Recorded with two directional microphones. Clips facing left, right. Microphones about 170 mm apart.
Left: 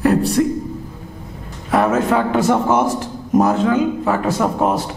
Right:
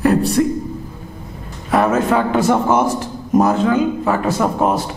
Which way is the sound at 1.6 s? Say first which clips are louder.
Right 1 dB; 5° right (ahead or behind).